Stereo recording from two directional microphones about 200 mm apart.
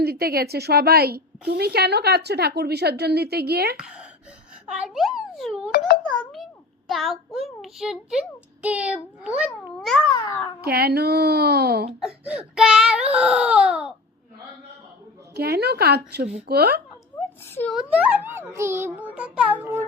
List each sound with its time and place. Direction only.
0.0 s a woman's voice: 50° right (ahead or behind)
3.8 s a child's voice: 5° right (ahead or behind)
6.8 s a child's voice: centre (ahead or behind)
10.2 s a child's voice: 20° left (ahead or behind)
10.6 s a woman's voice: 50° right (ahead or behind)
12.0 s a child's voice: 5° right (ahead or behind)
15.4 s a woman's voice: 55° right (ahead or behind)
17.4 s speech: 10° left (ahead or behind)
17.7 s a child's voice: 5° right (ahead or behind)